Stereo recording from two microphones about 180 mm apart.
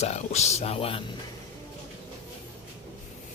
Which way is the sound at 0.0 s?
40° left (ahead or behind).